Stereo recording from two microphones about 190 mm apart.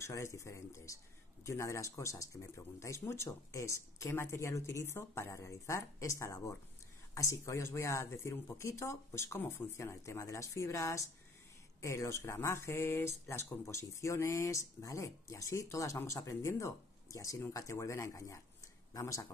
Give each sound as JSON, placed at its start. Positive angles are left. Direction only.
{"t": 0.0, "sound": "speech", "side_deg": 15}